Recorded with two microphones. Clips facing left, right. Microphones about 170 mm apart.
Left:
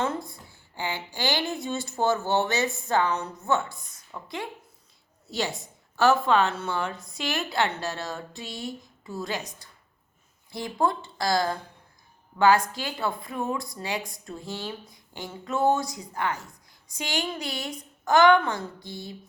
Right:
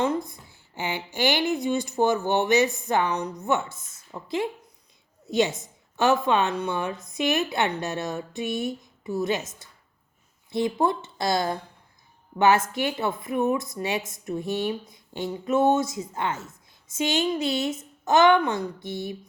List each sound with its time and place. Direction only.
0.0 s a woman's voice: 20° right (ahead or behind)
10.5 s speech: 20° right (ahead or behind)